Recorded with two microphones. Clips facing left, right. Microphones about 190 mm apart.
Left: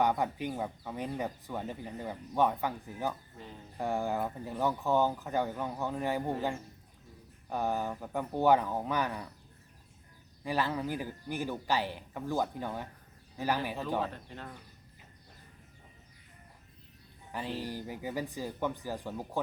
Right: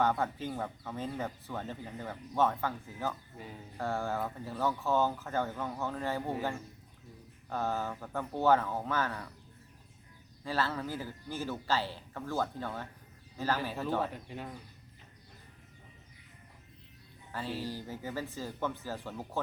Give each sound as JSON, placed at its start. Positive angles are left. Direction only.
{"t": 0.0, "sound": "speech", "side_deg": 15}
{"t": 7.5, "sound": "speech", "side_deg": 15}
{"t": 10.4, "sound": "speech", "side_deg": 15}
{"t": 14.1, "sound": "speech", "side_deg": -10}
{"t": 17.3, "sound": "speech", "side_deg": 15}